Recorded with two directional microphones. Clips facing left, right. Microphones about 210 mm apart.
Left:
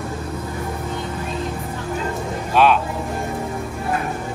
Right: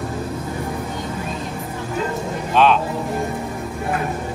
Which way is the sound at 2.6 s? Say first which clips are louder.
Even; 10° left (ahead or behind).